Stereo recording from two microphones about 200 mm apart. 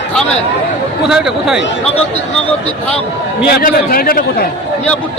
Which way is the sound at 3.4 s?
50° left (ahead or behind).